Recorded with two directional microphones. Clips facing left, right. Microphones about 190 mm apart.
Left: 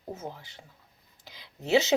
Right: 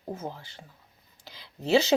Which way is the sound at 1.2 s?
15° left (ahead or behind).